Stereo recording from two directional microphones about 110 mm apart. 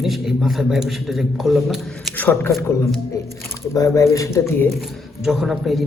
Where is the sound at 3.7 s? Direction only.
30° left (ahead or behind).